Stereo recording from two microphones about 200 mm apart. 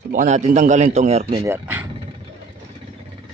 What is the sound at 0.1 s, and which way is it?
A man's voice, 40° right (ahead or behind).